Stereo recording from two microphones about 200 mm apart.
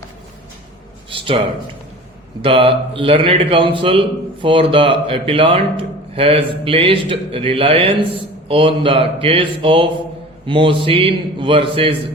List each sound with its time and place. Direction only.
1.1 s a man's voice: 25° right (ahead or behind)
2.4 s a man's voice: 25° right (ahead or behind)